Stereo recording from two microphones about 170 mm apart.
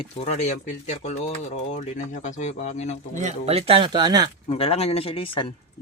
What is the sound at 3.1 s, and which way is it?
Speech, 45° right (ahead or behind).